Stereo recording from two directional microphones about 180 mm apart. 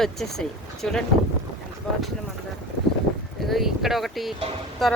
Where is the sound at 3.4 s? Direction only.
Centre (ahead or behind).